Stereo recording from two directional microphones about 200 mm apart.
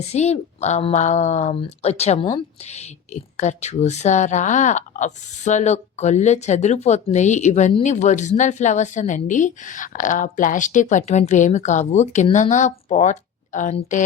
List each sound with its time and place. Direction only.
0.0 s speech: 35° left (ahead or behind)